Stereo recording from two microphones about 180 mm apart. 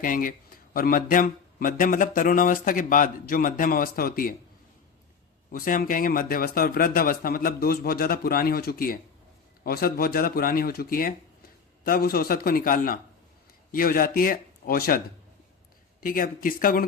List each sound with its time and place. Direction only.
0.0 s speech: 50° left (ahead or behind)
5.5 s speech: 50° left (ahead or behind)